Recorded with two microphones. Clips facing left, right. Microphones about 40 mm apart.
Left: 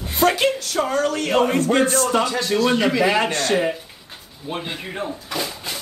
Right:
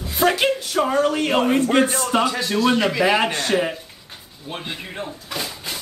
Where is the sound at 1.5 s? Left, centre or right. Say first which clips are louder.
Even; centre.